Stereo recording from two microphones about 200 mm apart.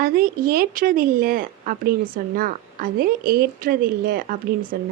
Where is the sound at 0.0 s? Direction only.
45° right (ahead or behind).